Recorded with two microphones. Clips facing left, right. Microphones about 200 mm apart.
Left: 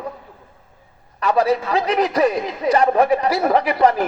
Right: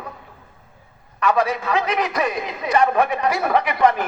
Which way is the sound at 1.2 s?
35° left (ahead or behind).